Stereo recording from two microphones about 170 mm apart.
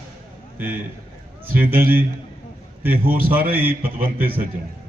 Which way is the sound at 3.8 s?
60° right (ahead or behind).